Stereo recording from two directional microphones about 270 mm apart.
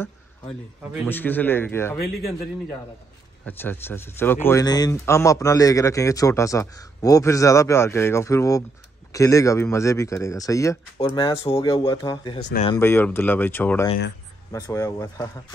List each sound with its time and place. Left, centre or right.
1.0 s speech: centre
3.4 s speech: centre
12.4 s speech: left
12.6 s speech: centre